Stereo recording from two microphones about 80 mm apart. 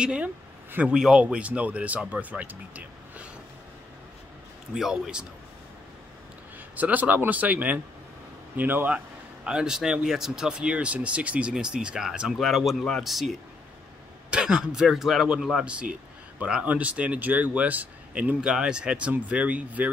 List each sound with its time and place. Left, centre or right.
0.0 s a man's voice: centre
0.9 s speech: centre
4.7 s speech: centre
6.8 s speech: centre
9.5 s speech: centre
14.3 s speech: centre
18.4 s speech: centre